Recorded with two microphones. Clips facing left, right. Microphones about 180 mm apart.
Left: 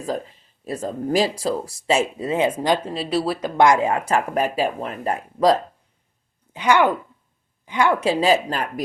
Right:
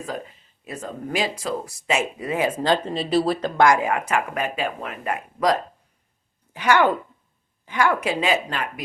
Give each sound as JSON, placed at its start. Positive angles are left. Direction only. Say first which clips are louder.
{"t": 0.6, "sound": "speech", "louder": "left 6 dB", "side_deg": 35}
{"t": 2.6, "sound": "speech", "louder": "even", "side_deg": 5}
{"t": 3.6, "sound": "speech", "louder": "left 2 dB", "side_deg": 25}
{"t": 6.5, "sound": "a woman's voice", "louder": "left 1 dB", "side_deg": 20}